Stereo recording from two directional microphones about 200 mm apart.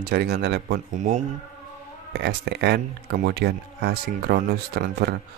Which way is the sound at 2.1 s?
55° right (ahead or behind).